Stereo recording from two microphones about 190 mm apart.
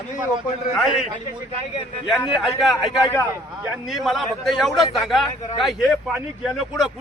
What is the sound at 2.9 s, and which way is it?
Speech, 20° left (ahead or behind).